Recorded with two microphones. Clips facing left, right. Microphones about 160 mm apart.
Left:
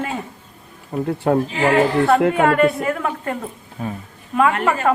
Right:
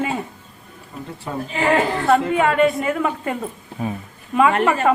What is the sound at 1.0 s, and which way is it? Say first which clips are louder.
Speech: left 12 dB; 65° left (ahead or behind).